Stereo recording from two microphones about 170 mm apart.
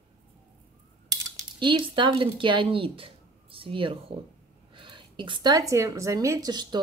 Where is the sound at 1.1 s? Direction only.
20° right (ahead or behind).